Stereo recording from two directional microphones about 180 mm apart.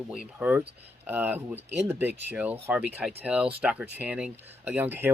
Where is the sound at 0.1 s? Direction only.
5° right (ahead or behind).